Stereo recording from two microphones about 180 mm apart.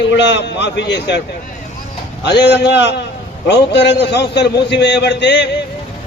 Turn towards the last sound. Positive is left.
turn(degrees=70)  # may be behind; listen again after turning